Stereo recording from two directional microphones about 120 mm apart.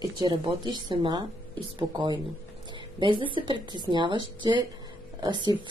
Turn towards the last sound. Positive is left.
turn(degrees=-40)  # may be behind; listen again after turning